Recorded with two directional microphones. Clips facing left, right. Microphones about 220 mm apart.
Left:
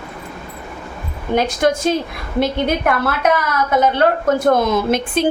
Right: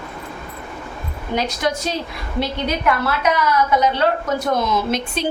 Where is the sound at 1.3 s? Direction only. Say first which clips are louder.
Left 5 dB; 50° left (ahead or behind).